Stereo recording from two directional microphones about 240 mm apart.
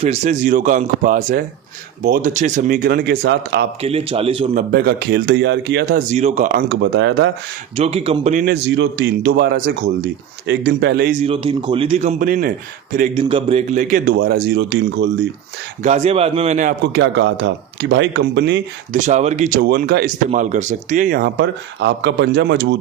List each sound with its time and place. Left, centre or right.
0.0 s a man's voice: right
3.8 s a man's voice: right
4.7 s a man's voice: right
7.8 s a man's voice: right
15.8 s a man's voice: right
16.9 s speech: right
18.9 s a man's voice: right